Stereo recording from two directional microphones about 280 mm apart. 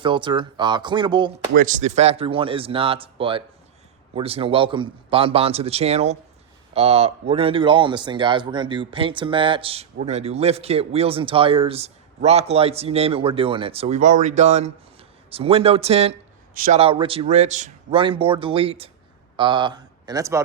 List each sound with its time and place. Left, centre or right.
0.0 s a man's voice: centre